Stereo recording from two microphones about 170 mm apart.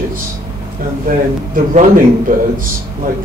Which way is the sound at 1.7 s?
50° right (ahead or behind).